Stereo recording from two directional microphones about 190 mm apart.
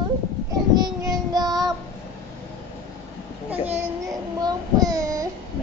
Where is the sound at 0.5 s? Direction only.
20° right (ahead or behind).